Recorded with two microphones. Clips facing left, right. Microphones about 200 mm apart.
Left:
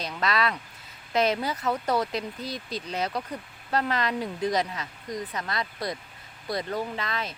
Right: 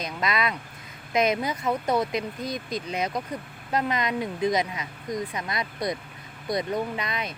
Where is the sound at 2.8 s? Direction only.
10° right (ahead or behind).